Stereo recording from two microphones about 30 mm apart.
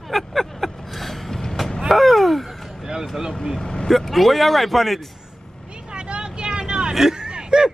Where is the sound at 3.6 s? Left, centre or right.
Left.